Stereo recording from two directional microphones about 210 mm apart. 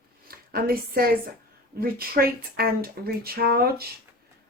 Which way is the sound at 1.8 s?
45° right (ahead or behind).